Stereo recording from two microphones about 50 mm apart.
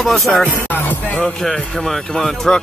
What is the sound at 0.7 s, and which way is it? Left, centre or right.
Music, left.